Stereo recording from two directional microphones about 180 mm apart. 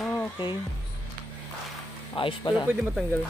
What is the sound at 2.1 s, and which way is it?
Speech, 25° left (ahead or behind).